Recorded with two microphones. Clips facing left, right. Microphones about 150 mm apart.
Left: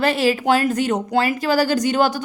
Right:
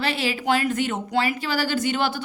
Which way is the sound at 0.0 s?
45° left (ahead or behind).